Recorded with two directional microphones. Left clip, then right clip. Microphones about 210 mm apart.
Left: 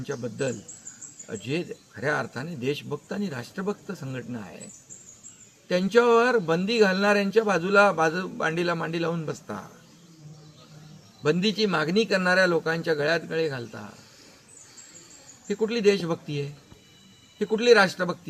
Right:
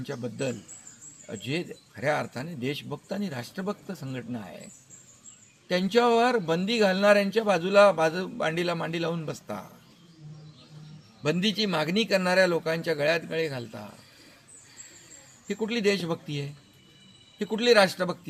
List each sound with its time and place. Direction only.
0.0 s a man's voice: centre (ahead or behind)
5.6 s a man's voice: centre (ahead or behind)
11.2 s a man's voice: centre (ahead or behind)
15.4 s a man's voice: centre (ahead or behind)